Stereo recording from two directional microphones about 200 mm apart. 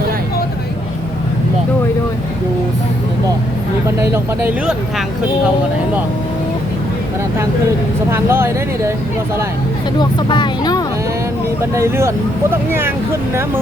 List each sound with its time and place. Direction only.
3.8 s speech: 10° right (ahead or behind)
8.1 s speech: 10° right (ahead or behind)
10.0 s speech: 20° left (ahead or behind)
11.7 s speech: 15° right (ahead or behind)